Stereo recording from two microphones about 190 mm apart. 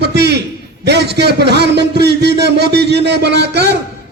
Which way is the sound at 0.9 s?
60° right (ahead or behind).